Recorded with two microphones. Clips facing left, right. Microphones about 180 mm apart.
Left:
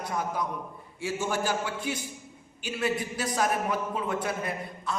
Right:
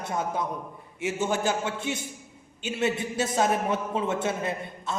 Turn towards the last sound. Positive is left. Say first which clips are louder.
# right 2 dB
turn(degrees=-25)  # may be behind; listen again after turning